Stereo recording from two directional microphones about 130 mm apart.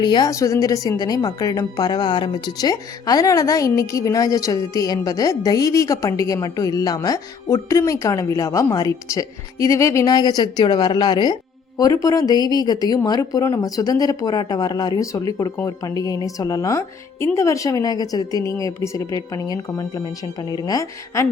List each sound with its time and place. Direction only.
0.0 s a woman's voice: 35° left (ahead or behind)